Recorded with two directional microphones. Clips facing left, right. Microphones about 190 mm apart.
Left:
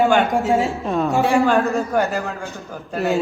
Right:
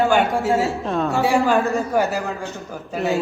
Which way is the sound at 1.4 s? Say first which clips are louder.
Left 1 dB; centre (ahead or behind).